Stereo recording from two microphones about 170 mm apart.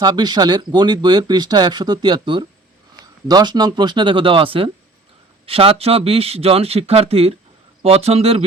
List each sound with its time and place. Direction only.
0.0 s speech: 25° right (ahead or behind)